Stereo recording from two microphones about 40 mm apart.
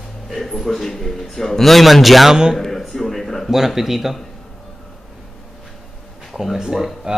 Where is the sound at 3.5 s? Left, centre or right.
Centre.